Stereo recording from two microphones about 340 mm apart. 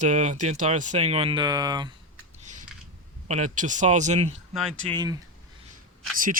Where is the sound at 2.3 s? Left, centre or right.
Right.